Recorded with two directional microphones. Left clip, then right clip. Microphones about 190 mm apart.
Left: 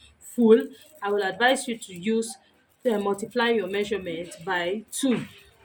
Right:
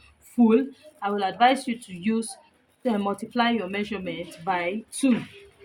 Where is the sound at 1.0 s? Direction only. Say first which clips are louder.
Right 2 dB; 25° right (ahead or behind).